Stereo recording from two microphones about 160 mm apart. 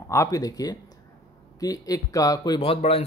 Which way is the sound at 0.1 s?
20° left (ahead or behind).